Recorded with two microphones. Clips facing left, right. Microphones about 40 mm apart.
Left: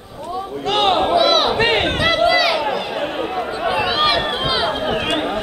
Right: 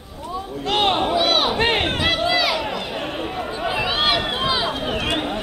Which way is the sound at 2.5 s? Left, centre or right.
Centre.